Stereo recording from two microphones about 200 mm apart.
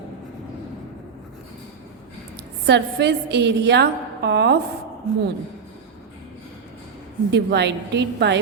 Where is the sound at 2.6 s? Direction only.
55° right (ahead or behind).